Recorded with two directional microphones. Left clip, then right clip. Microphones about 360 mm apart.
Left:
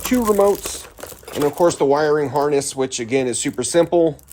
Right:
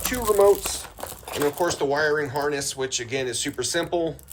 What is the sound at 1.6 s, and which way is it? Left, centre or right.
Speech, centre.